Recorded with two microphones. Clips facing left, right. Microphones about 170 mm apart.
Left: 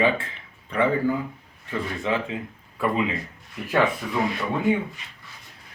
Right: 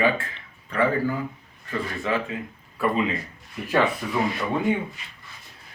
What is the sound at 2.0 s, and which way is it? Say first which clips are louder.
Speech: even; 20° left (ahead or behind).